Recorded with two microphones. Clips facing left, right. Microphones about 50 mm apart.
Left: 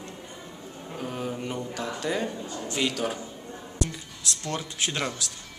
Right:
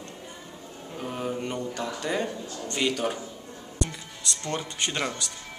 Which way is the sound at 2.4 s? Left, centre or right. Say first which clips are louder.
Left 1 dB; centre.